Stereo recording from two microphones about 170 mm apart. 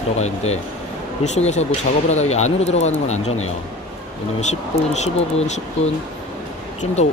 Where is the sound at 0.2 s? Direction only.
40° left (ahead or behind).